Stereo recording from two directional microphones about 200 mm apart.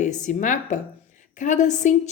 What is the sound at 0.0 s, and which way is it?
A woman's voice, 35° left (ahead or behind).